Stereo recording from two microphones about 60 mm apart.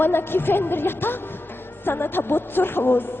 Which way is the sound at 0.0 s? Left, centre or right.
Left.